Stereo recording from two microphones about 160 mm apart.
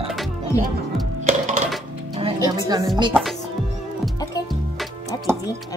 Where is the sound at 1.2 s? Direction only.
55° right (ahead or behind).